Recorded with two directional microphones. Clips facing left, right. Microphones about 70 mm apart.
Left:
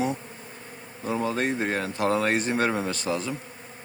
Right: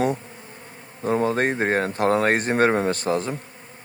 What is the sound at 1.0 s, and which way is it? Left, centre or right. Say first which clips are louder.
Speech: right 5 dB; right.